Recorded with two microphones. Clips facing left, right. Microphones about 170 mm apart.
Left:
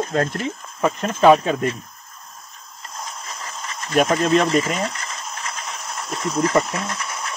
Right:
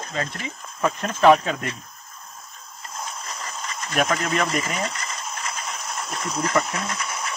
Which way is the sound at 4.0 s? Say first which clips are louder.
Left 6 dB; 25° left (ahead or behind).